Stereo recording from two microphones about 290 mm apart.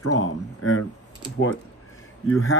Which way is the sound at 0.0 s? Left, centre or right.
Left.